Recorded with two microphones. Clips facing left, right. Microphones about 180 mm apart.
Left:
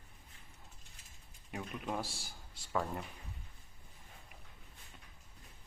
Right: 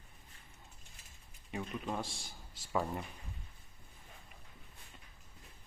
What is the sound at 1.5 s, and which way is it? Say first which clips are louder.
A man's voice: right 1 dB; 5° left (ahead or behind).